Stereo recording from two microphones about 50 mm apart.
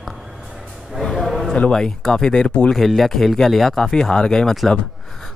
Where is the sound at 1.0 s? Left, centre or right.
Centre.